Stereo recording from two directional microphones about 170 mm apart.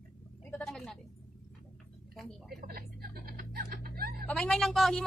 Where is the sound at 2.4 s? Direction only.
65° right (ahead or behind).